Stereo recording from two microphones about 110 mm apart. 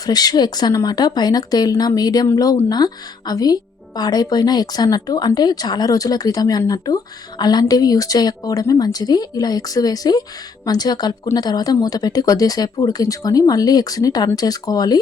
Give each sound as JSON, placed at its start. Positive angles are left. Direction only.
{"t": 0.0, "sound": "speech", "side_deg": 35}